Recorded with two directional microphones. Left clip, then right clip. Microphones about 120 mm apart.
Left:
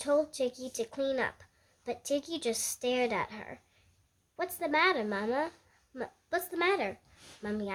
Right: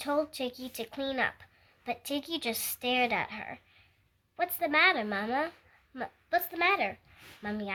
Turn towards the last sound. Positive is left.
turn(degrees=45)  # may be behind; listen again after turning